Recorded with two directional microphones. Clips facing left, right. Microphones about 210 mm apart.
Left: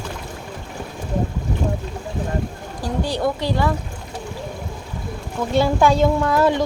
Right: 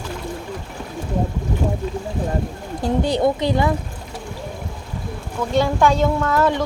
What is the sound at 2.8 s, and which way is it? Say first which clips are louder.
Speech: right 4 dB; 20° right (ahead or behind).